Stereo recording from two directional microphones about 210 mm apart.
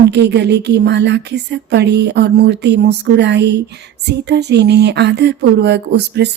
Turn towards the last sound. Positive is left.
turn(degrees=-55)  # may be behind; listen again after turning